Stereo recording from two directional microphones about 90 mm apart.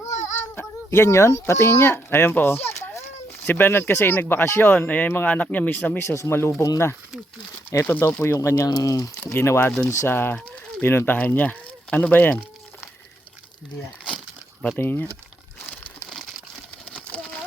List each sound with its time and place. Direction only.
0.9 s speech: 30° left (ahead or behind)
6.1 s speech: 30° left (ahead or behind)
9.2 s speech: 25° left (ahead or behind)
14.8 s speech: 25° left (ahead or behind)
16.9 s a sound: 10° left (ahead or behind)